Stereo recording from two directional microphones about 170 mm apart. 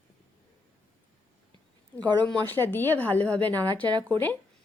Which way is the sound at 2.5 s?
10° left (ahead or behind).